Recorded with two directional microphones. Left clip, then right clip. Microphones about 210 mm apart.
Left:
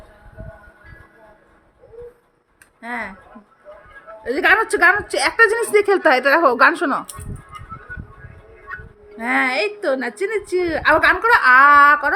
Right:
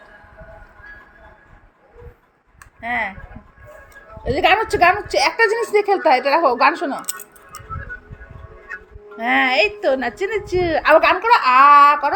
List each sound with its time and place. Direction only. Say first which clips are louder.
2.8 s a woman's voice: right 5 dB; 20° left (ahead or behind)
4.2 s a woman's voice: even; 25° left (ahead or behind); by 7.0 s 45° left (ahead or behind)
8.7 s music: even; centre (ahead or behind)
9.1 s a woman's voice: right 3 dB; 20° left (ahead or behind)